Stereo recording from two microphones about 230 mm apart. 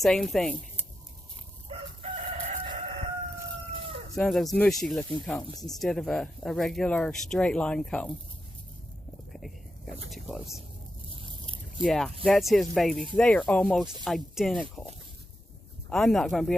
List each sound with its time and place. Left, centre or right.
0.0 s speech: centre
1.6 s crowing: right
4.1 s speech: centre
9.3 s whispering: centre
10.1 s speech: centre
15.9 s speech: centre